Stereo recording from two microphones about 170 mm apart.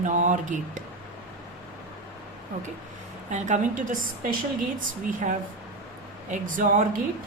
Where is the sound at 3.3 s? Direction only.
50° right (ahead or behind).